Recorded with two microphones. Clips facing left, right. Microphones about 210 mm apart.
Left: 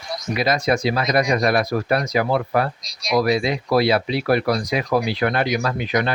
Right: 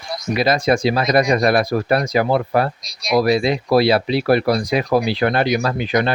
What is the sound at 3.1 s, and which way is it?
Speech, 30° right (ahead or behind).